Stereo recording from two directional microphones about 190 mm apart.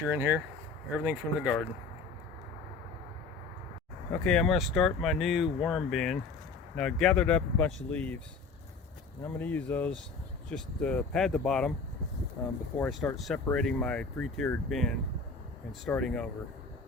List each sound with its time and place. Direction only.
0.1 s speech: 10° right (ahead or behind)
4.1 s speech: 5° left (ahead or behind)
9.2 s speech: 10° left (ahead or behind)